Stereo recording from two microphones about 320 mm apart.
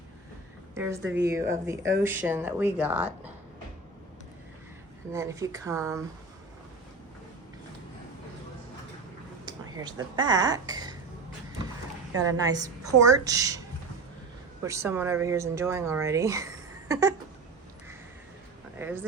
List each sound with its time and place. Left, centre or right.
1.0 s speech: right
1.3 s speech: centre
5.1 s speech: centre
9.5 s speech: centre
12.1 s speech: centre
14.6 s speech: centre
18.8 s speech: centre